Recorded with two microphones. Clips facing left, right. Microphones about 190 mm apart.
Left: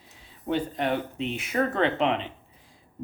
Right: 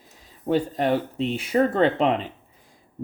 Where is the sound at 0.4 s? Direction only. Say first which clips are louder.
Right 5 dB; 35° right (ahead or behind).